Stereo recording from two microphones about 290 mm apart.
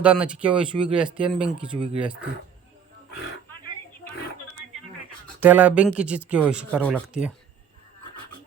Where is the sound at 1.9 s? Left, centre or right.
Centre.